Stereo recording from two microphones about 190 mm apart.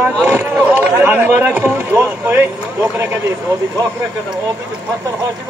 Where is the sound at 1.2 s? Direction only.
10° right (ahead or behind).